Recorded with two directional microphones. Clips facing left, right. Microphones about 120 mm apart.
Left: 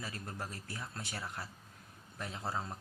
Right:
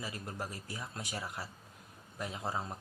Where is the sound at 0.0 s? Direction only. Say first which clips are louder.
Right 2 dB; 15° right (ahead or behind).